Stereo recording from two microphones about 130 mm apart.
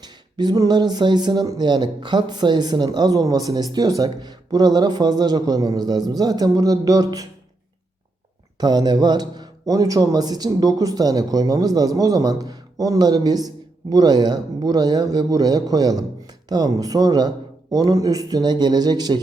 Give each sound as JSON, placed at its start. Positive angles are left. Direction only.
{"t": 0.0, "sound": "speech", "side_deg": -35}
{"t": 8.5, "sound": "speech", "side_deg": -30}